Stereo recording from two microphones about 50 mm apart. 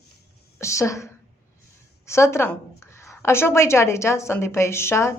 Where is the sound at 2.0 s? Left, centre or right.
Left.